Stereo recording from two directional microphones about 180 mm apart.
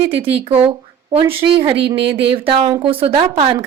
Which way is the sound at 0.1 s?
30° right (ahead or behind).